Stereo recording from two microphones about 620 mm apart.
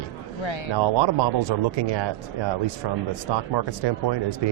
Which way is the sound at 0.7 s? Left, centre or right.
Right.